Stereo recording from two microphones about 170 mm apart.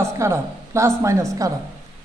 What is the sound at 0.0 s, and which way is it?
A woman's voice, 15° right (ahead or behind).